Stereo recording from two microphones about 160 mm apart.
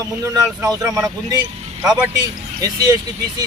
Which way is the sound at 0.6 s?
20° right (ahead or behind).